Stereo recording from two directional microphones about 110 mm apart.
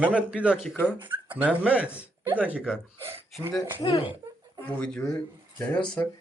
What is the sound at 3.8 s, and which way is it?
Speech, 55° left (ahead or behind).